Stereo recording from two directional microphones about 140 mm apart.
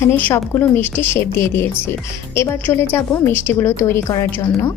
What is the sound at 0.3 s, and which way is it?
A woman's voice, 20° left (ahead or behind).